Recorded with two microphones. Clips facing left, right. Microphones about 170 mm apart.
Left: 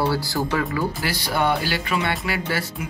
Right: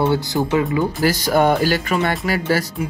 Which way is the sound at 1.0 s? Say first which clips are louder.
Right 10 dB; 45° right (ahead or behind).